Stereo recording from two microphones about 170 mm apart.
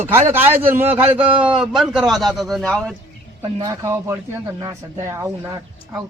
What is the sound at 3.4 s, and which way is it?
A man's voice, 20° right (ahead or behind).